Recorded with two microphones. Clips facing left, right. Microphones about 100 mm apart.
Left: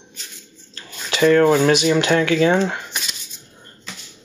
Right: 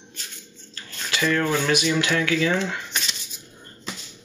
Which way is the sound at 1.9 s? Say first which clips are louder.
Left 6 dB; 35° left (ahead or behind).